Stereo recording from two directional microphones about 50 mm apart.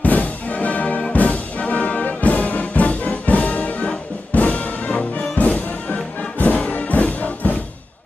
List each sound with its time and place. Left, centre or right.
0.0 s music: left